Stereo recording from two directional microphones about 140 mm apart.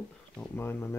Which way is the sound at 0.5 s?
15° left (ahead or behind).